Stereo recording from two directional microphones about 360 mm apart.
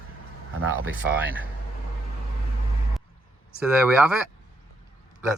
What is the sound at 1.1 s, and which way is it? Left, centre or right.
Speech, centre.